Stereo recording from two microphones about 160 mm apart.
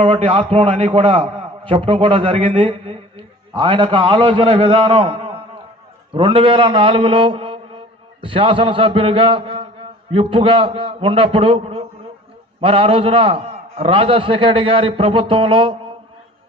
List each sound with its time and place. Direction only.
0.0 s a man's voice: 30° right (ahead or behind)